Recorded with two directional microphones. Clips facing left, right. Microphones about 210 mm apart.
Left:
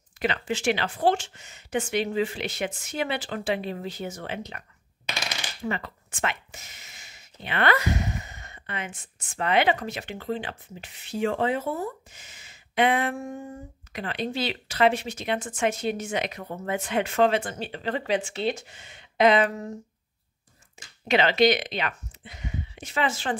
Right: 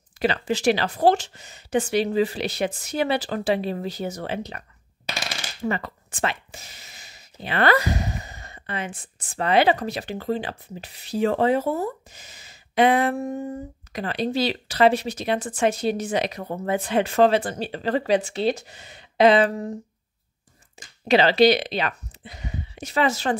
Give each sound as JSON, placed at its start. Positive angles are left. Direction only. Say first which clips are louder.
{"t": 0.2, "sound": "speech", "louder": "right 5 dB", "side_deg": -35}
{"t": 20.8, "sound": "a sound", "louder": "right 3 dB", "side_deg": -35}
{"t": 21.1, "sound": "speech", "louder": "right 4 dB", "side_deg": -35}